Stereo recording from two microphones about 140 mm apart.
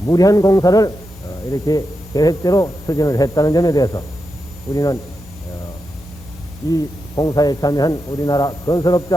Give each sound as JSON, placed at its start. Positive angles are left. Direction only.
{"t": 0.1, "sound": "speech", "side_deg": 25}
{"t": 6.6, "sound": "speech", "side_deg": 30}